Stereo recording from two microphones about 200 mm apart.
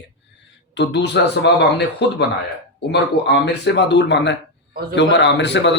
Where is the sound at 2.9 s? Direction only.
60° left (ahead or behind).